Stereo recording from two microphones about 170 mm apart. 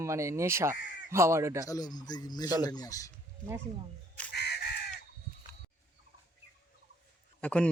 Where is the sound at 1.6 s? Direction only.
20° left (ahead or behind).